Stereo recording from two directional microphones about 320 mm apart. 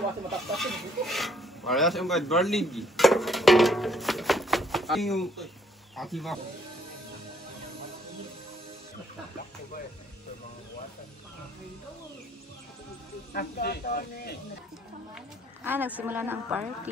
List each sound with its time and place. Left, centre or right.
0.3 s a woman's voice: centre
13.3 s speech: left
15.1 s a sound: centre
16.0 s a woman's voice: centre